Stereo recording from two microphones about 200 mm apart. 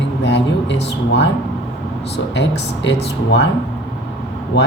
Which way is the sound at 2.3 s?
65° left (ahead or behind).